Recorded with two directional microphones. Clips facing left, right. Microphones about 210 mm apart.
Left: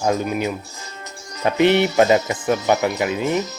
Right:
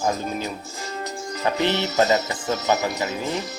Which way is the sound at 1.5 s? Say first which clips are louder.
Left 8 dB; 15° left (ahead or behind).